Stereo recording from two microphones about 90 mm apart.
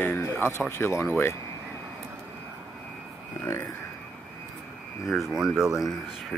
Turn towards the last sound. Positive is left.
turn(degrees=-5)  # may be behind; listen again after turning